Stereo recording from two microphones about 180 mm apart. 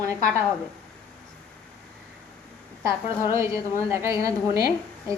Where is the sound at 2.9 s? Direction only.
15° right (ahead or behind).